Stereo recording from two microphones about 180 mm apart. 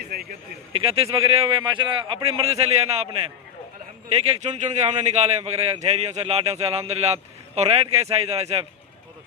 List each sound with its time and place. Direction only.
0.0 s speech: 55° right (ahead or behind)
0.7 s a man's voice: 30° right (ahead or behind)